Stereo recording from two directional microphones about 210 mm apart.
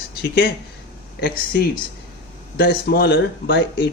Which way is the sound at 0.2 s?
50° left (ahead or behind).